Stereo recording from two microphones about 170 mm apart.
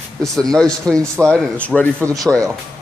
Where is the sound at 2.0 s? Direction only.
20° right (ahead or behind).